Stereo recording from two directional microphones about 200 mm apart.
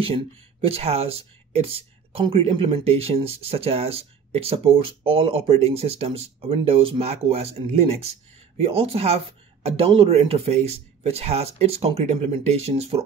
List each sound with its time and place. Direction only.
0.0 s speech: 30° right (ahead or behind)